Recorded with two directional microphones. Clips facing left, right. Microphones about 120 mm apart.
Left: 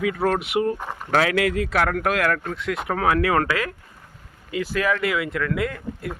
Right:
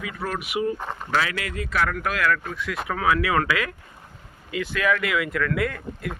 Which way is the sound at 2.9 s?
45° left (ahead or behind).